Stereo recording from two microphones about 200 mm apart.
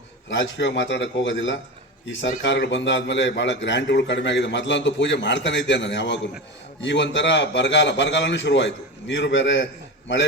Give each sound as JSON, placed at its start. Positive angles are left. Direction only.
{"t": 0.3, "sound": "a man's voice", "side_deg": 65}